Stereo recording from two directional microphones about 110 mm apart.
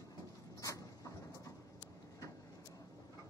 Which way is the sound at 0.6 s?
30° left (ahead or behind).